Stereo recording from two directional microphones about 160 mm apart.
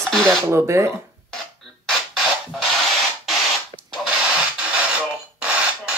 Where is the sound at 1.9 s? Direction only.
Centre (ahead or behind).